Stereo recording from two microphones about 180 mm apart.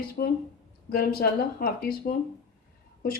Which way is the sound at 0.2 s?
50° left (ahead or behind).